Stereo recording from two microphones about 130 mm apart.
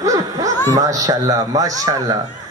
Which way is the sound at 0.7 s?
25° right (ahead or behind).